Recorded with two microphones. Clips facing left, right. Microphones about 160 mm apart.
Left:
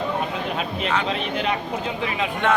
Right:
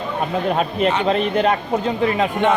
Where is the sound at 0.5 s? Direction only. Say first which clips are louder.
Right 6 dB; 45° right (ahead or behind).